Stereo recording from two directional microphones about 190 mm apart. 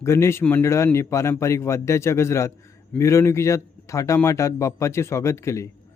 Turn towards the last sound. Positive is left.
turn(degrees=15)  # may be behind; listen again after turning